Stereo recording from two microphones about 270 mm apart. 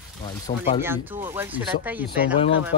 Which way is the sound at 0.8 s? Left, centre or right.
Centre.